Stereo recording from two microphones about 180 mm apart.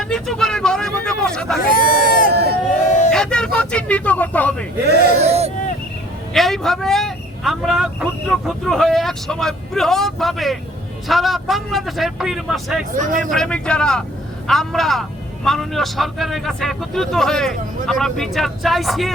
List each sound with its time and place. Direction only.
0.0 s vehicle: centre (ahead or behind)
1.6 s bleat: 50° left (ahead or behind)
2.3 s crowd: 65° right (ahead or behind)
3.1 s vehicle: 5° left (ahead or behind)
5.2 s a sound: 35° right (ahead or behind)
6.3 s speech: centre (ahead or behind)
13.0 s speech: 45° right (ahead or behind)
13.3 s speech: 5° left (ahead or behind)